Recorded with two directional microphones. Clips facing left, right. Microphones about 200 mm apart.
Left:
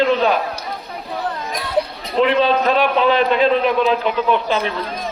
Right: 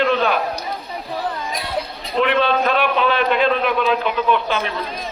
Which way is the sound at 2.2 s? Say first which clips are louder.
Left 2 dB; 30° left (ahead or behind).